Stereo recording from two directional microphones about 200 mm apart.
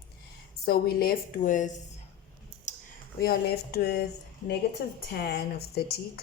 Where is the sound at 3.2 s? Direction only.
50° left (ahead or behind).